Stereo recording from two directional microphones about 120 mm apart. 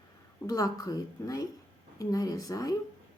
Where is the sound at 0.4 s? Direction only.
30° left (ahead or behind).